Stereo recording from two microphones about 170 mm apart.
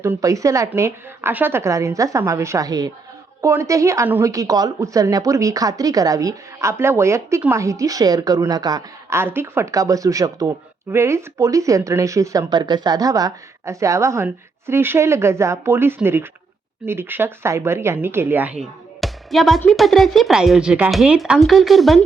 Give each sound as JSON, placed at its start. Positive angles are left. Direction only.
{"t": 0.0, "sound": "speech", "side_deg": -20}
{"t": 18.9, "sound": "speech", "side_deg": 0}